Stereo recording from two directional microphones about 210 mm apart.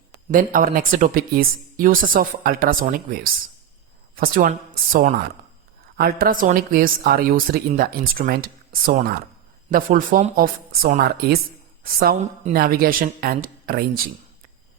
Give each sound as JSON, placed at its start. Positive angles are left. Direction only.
{"t": 0.3, "sound": "a woman's voice", "side_deg": -40}
{"t": 9.7, "sound": "a woman's voice", "side_deg": -40}